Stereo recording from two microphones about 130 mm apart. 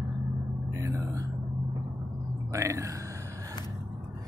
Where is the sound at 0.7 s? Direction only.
25° right (ahead or behind).